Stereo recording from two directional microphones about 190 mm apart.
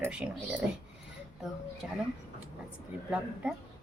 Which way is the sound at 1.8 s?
5° right (ahead or behind).